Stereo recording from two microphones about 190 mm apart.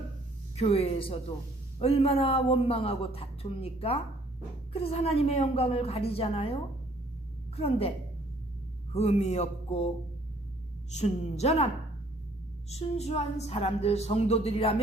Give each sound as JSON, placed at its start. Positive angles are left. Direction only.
{"t": 0.5, "sound": "a woman's voice", "side_deg": 30}
{"t": 10.9, "sound": "a woman's voice", "side_deg": 35}